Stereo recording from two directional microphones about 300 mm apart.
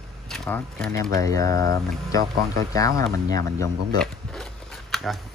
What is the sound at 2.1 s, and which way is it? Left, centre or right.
Speech, centre.